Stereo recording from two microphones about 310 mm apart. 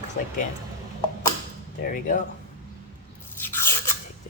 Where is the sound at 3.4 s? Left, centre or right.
Centre.